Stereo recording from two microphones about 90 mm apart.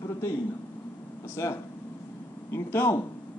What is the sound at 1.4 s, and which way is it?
A man's voice, 35° left (ahead or behind).